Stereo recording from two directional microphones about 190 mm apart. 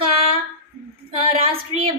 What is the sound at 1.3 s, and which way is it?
Speech, 30° right (ahead or behind).